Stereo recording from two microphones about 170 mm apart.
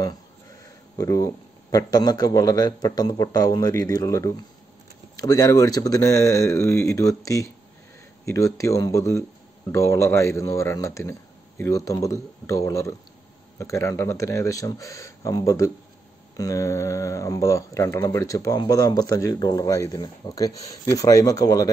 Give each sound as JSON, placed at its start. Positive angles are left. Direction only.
{"t": 0.9, "sound": "speech", "side_deg": 20}